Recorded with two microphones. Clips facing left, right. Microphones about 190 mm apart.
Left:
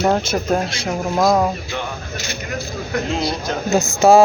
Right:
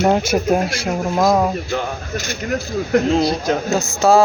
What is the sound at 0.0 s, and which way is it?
Speech, 10° right (ahead or behind).